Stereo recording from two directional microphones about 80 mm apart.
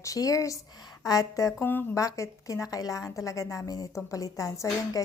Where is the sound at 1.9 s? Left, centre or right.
Left.